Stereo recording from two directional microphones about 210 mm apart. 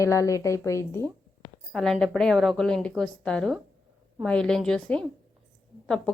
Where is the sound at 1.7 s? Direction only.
Centre (ahead or behind).